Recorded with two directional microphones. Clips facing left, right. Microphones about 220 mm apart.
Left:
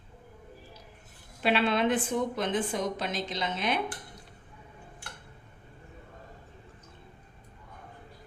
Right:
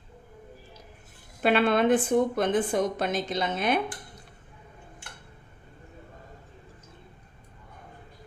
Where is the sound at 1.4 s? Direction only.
50° right (ahead or behind).